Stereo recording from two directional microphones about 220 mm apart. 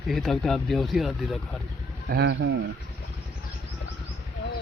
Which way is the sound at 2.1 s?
50° right (ahead or behind).